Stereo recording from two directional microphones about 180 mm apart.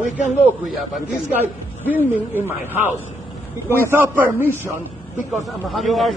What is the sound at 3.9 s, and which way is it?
Speech, 10° right (ahead or behind).